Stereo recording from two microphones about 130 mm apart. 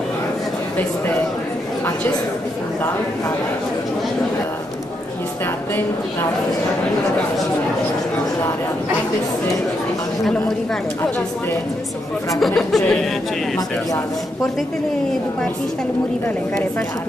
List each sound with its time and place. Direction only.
12.4 s speech: centre (ahead or behind)